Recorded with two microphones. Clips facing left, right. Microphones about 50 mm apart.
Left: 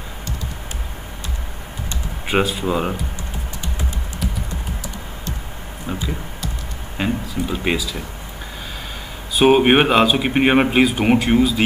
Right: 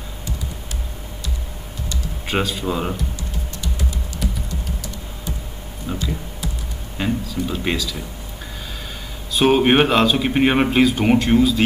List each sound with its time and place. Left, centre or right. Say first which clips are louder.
2.2 s speech: left 3 dB; centre
5.9 s speech: even; centre
9.3 s speech: left 2 dB; centre